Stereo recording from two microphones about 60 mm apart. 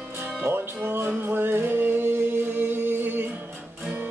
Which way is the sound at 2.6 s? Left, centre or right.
Right.